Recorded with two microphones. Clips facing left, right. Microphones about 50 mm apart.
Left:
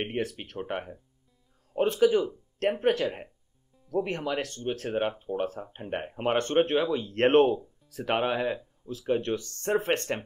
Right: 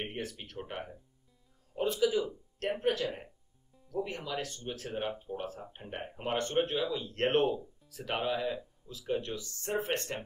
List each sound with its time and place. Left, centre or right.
0.0 s speech: left